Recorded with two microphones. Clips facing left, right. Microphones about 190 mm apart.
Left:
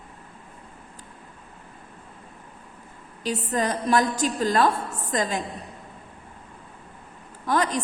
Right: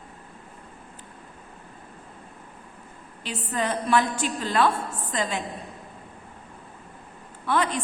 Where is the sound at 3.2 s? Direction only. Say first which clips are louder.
Left 3 dB; 40° left (ahead or behind).